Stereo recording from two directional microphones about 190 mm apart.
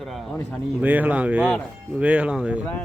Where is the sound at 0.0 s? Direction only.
Centre (ahead or behind).